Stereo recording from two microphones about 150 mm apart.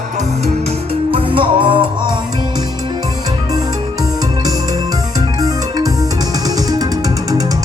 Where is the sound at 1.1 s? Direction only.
35° right (ahead or behind).